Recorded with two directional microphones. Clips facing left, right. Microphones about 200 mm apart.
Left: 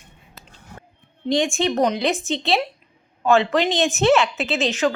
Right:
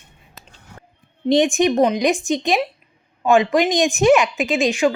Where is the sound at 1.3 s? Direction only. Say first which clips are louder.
Right 5 dB; 20° right (ahead or behind).